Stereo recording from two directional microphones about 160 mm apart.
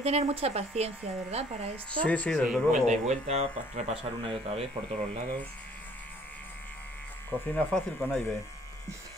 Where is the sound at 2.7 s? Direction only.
50° right (ahead or behind).